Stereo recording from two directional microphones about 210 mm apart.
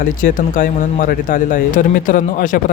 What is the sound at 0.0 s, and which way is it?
Speech, 40° left (ahead or behind).